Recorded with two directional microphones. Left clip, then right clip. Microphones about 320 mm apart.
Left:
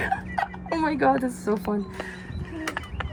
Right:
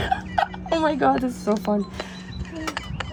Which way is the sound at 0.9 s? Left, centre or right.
Right.